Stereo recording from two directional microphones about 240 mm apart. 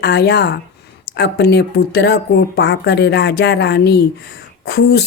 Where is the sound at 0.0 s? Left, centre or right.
Left.